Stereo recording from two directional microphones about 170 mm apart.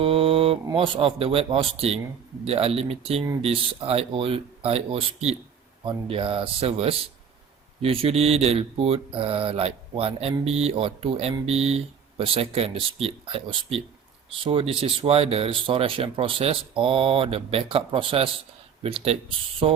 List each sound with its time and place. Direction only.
0.0 s speech: 35° right (ahead or behind)